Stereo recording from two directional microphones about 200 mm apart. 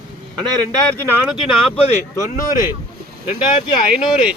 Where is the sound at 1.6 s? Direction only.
30° left (ahead or behind).